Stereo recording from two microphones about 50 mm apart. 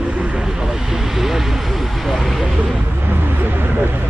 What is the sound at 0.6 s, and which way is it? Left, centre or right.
Speech, centre.